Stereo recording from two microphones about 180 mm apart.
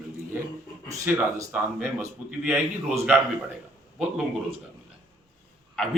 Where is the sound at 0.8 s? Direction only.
15° right (ahead or behind).